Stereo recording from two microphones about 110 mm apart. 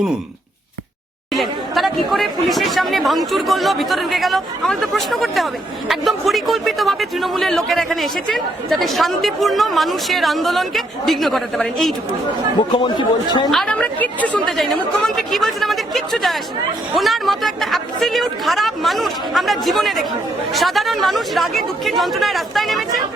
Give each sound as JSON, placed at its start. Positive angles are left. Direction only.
{"t": 1.3, "sound": "a man's voice", "side_deg": 0}
{"t": 12.7, "sound": "a man's voice", "side_deg": 45}
{"t": 13.5, "sound": "a man's voice", "side_deg": 5}